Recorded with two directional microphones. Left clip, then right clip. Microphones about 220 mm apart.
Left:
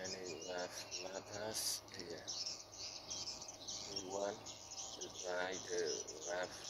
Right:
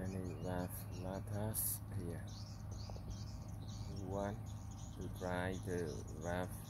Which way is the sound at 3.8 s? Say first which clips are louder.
Left 4 dB; 20° left (ahead or behind).